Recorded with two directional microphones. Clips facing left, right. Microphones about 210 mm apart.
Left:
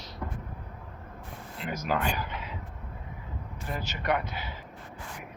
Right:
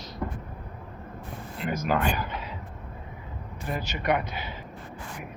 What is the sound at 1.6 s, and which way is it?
Speech, 50° right (ahead or behind).